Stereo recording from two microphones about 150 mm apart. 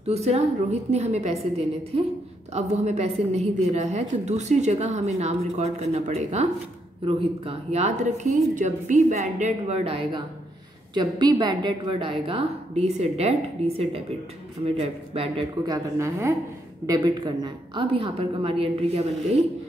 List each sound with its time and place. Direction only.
0.0 s a woman's voice: 45° right (ahead or behind)
11.0 s a woman's voice: 30° right (ahead or behind)
15.6 s a woman's voice: 20° right (ahead or behind); by 19.0 s 40° right (ahead or behind)